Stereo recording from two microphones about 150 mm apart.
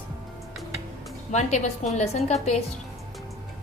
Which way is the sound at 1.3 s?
50° left (ahead or behind).